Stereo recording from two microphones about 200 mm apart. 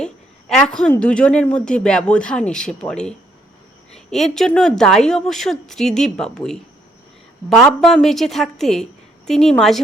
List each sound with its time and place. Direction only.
0.0 s speech: 5° left (ahead or behind)